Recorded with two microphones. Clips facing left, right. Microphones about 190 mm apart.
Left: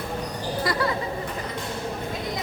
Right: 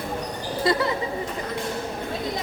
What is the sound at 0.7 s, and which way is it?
Chatter, 25° right (ahead or behind).